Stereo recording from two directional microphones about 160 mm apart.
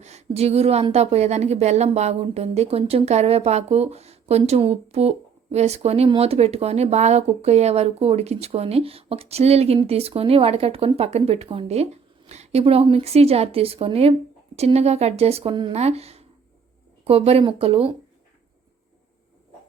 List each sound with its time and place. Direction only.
0.0 s a woman's voice: 45° right (ahead or behind)